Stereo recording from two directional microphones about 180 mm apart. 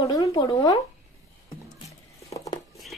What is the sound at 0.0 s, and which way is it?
Speech, 20° left (ahead or behind).